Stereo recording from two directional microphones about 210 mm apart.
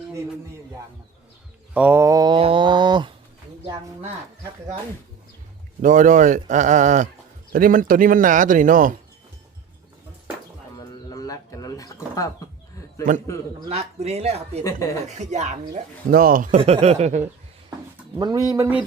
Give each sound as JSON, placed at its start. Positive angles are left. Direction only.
{"t": 1.7, "sound": "mantra", "side_deg": -10}
{"t": 5.8, "sound": "speech", "side_deg": -40}
{"t": 10.8, "sound": "bird", "side_deg": 15}
{"t": 13.0, "sound": "speech", "side_deg": -40}
{"t": 16.6, "sound": "speech", "side_deg": -30}
{"t": 18.2, "sound": "pigeon", "side_deg": -20}